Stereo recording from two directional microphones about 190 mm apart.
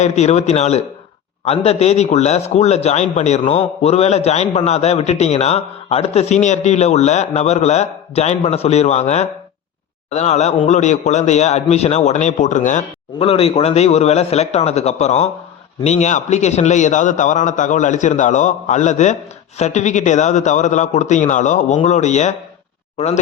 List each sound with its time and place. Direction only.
0.0 s a man's voice: 35° left (ahead or behind)